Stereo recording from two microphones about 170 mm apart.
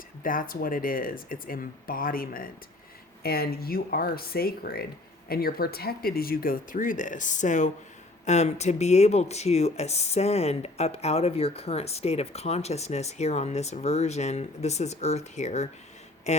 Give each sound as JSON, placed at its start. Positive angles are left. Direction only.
{"t": 0.2, "sound": "speech", "side_deg": 55}